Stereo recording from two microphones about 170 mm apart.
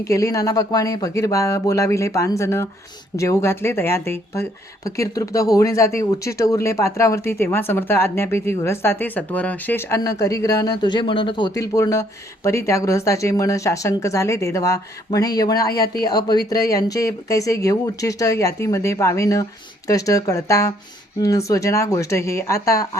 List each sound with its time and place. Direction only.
0.0 s speech: 20° left (ahead or behind)